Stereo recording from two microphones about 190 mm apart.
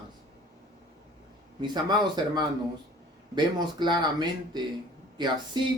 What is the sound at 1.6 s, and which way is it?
Speech, 20° right (ahead or behind).